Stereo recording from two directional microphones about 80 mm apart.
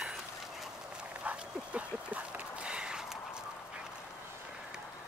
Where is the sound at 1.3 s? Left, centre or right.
Centre.